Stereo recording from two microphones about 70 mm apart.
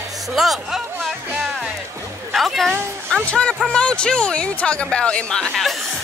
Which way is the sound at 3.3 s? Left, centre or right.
Centre.